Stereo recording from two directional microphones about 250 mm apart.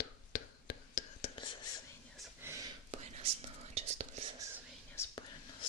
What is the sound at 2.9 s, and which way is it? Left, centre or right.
Whispering, right.